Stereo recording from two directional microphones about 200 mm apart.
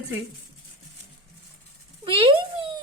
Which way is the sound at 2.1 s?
25° right (ahead or behind).